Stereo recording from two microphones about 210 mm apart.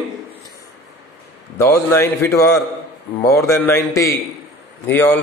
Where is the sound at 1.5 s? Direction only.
15° left (ahead or behind).